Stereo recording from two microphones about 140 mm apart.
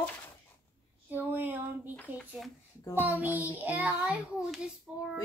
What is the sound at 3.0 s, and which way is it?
A child's voice, 10° right (ahead or behind).